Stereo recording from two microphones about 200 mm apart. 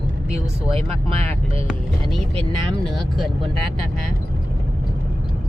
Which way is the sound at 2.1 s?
5° left (ahead or behind).